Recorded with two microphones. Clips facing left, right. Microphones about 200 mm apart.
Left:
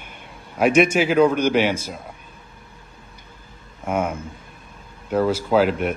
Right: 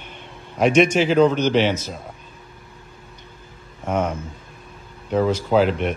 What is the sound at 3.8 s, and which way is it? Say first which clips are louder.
A man's voice: right 1 dB; 10° left (ahead or behind).